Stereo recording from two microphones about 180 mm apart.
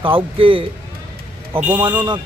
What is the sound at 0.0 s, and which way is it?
Speech, 30° right (ahead or behind).